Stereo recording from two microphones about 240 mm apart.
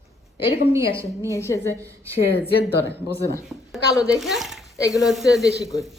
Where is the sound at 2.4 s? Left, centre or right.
Left.